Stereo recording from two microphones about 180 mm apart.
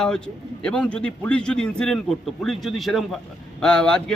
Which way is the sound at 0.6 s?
5° left (ahead or behind).